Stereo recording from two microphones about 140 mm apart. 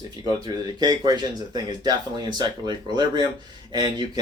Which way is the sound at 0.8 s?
30° right (ahead or behind).